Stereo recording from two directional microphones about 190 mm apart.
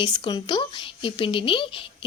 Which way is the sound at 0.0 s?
25° left (ahead or behind).